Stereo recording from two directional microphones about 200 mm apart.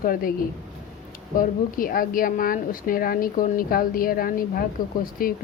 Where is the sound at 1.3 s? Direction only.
45° left (ahead or behind).